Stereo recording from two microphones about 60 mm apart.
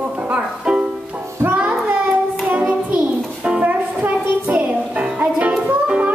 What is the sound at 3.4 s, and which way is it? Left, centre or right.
Music, right.